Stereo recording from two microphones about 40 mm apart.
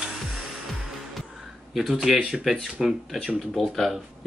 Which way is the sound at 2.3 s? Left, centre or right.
Centre.